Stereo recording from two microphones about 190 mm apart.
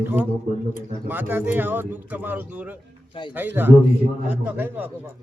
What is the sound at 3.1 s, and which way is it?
Speech, 25° left (ahead or behind).